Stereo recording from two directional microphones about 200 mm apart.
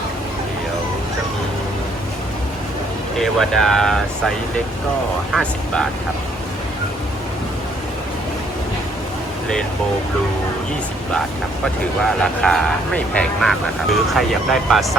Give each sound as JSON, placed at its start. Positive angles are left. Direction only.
{"t": 3.2, "sound": "speech", "side_deg": 0}
{"t": 5.3, "sound": "speech", "side_deg": 5}
{"t": 11.6, "sound": "speech", "side_deg": 0}